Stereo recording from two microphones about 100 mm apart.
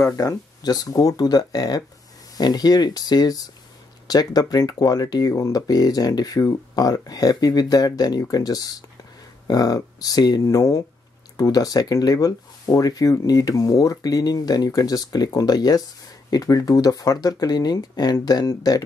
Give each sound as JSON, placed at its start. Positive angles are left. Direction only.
{"t": 0.0, "sound": "speech", "side_deg": 30}